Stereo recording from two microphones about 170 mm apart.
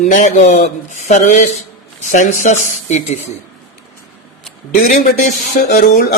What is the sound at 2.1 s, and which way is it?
A man's voice, 45° left (ahead or behind).